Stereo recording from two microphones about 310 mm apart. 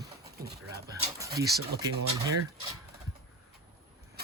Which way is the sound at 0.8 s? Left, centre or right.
Centre.